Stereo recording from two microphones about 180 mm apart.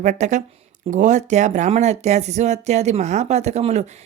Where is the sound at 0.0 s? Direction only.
40° right (ahead or behind).